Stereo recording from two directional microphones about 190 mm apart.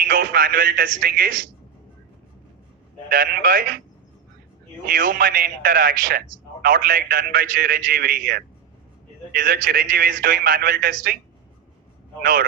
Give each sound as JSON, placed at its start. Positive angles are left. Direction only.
{"t": 0.0, "sound": "a man's voice", "side_deg": -50}
{"t": 3.1, "sound": "a man's voice", "side_deg": -50}
{"t": 4.9, "sound": "a man's voice", "side_deg": -50}
{"t": 12.2, "sound": "a man's voice", "side_deg": -50}